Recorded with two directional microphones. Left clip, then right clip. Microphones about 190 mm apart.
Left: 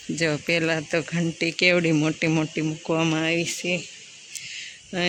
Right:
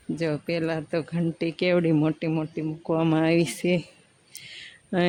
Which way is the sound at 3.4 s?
35° right (ahead or behind).